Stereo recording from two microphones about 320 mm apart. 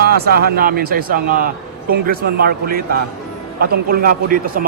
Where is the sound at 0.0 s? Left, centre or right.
Right.